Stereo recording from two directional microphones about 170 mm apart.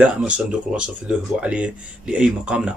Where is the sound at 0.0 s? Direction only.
5° right (ahead or behind).